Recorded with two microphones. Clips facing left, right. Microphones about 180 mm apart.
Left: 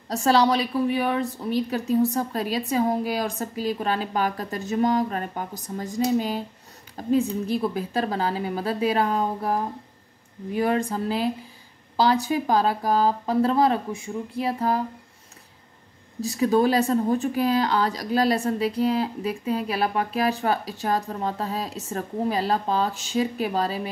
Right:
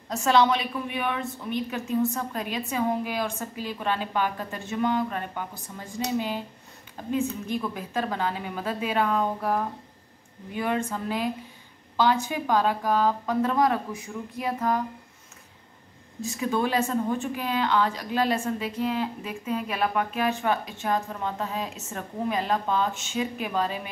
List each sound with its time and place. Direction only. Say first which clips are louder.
0.1 s speech: left 2 dB; 35° left (ahead or behind)
16.2 s speech: left 6 dB; 35° left (ahead or behind)